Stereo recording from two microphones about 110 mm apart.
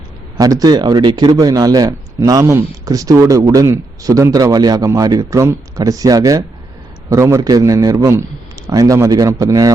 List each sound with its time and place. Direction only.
0.3 s speech: 35° right (ahead or behind)
2.4 s speech: 20° right (ahead or behind)
2.8 s speech: 30° right (ahead or behind)